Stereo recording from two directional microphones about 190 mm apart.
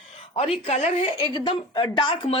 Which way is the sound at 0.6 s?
35° left (ahead or behind).